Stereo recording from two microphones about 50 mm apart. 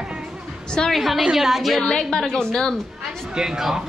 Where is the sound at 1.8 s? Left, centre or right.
Centre.